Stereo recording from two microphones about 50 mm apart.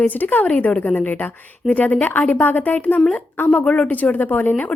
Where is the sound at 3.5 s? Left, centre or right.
Left.